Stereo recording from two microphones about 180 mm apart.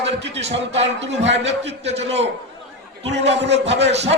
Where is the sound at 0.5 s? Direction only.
85° right.